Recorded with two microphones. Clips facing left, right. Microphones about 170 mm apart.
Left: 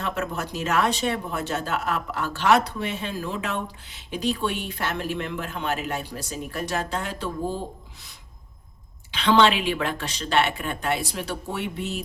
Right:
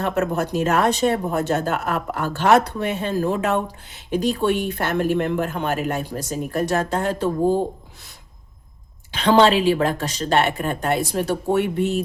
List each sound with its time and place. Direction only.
0.0 s speech: 50° right (ahead or behind)
9.1 s speech: 45° right (ahead or behind)